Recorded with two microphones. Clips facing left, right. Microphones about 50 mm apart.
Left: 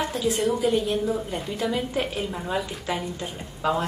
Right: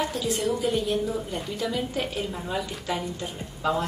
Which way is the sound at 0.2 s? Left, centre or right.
Left.